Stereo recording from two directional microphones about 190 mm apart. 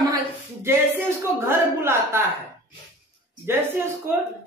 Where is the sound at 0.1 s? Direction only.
15° right (ahead or behind).